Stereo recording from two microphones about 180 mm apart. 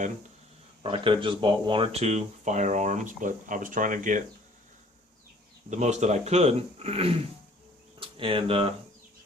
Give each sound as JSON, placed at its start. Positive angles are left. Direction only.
{"t": 0.8, "sound": "speech", "side_deg": -30}
{"t": 5.7, "sound": "speech", "side_deg": -40}